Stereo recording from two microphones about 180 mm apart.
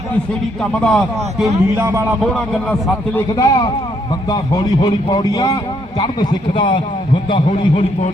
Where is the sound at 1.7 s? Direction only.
15° right (ahead or behind).